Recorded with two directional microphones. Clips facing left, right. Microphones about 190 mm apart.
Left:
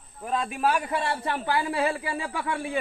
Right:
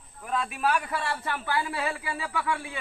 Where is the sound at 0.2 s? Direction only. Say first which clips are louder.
Left 2 dB; 25° left (ahead or behind).